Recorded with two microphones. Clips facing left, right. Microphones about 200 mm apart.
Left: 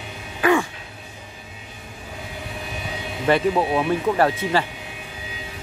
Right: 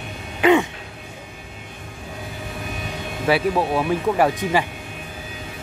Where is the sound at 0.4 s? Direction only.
20° right (ahead or behind).